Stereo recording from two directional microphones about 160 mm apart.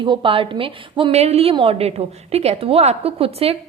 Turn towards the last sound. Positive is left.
turn(degrees=-40)  # may be behind; listen again after turning